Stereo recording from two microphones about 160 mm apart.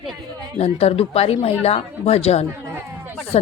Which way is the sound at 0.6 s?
40° left (ahead or behind).